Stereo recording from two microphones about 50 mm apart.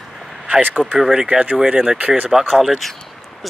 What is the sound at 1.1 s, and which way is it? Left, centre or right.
Speech, centre.